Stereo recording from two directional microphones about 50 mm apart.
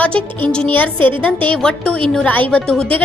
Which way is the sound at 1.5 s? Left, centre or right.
Centre.